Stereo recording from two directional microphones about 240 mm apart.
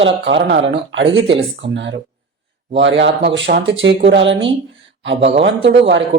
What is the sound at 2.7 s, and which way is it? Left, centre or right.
Speech, right.